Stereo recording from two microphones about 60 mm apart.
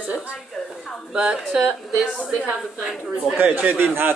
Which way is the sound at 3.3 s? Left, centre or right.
Right.